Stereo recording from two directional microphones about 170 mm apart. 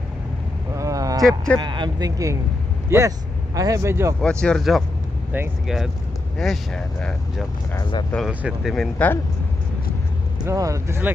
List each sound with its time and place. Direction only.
0.7 s a sound: 20° right (ahead or behind)
1.6 s speech: 25° right (ahead or behind)
4.2 s speech: 5° left (ahead or behind)
7.7 s speech: 25° left (ahead or behind)
8.3 s speech: 5° right (ahead or behind); by 9.2 s 10° left (ahead or behind)
10.4 s speech: 20° right (ahead or behind)